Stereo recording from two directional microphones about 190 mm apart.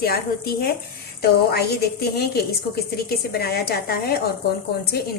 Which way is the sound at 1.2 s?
55° left (ahead or behind).